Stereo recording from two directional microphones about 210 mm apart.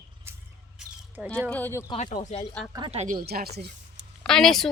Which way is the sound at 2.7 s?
25° right (ahead or behind).